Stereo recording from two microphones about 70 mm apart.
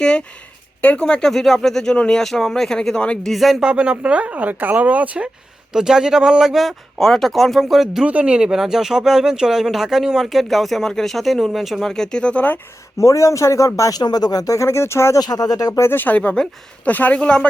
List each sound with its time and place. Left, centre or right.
0.0 s speech: centre
3.3 s speech: centre
3.7 s speech: centre
5.7 s speech: centre
8.0 s speech: centre
13.0 s speech: left
14.0 s speech: left
15.2 s speech: left
15.8 s speech: left; by 17.5 s centre